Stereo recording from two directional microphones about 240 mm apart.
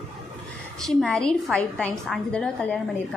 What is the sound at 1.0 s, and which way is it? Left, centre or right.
A woman's voice, centre.